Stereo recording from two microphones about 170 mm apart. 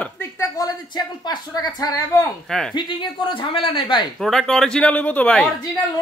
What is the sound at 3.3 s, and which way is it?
Speech, 30° left (ahead or behind).